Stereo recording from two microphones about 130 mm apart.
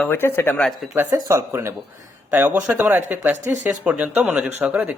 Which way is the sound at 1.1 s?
20° right (ahead or behind).